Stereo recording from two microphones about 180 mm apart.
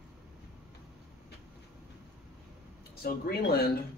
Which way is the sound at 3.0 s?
60° left (ahead or behind).